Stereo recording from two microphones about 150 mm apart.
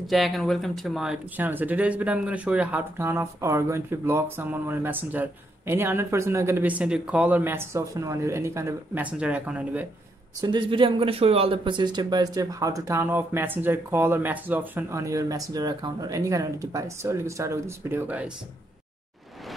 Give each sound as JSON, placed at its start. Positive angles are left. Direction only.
{"t": 0.0, "sound": "speech", "side_deg": 0}
{"t": 10.4, "sound": "speech", "side_deg": -30}